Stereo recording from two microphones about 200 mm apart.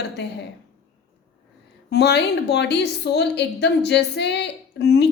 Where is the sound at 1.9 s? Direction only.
55° left (ahead or behind).